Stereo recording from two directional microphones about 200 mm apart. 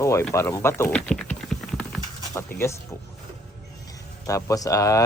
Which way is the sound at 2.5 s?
45° left (ahead or behind).